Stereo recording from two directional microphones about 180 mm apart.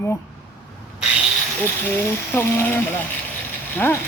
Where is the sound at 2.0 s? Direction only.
15° left (ahead or behind).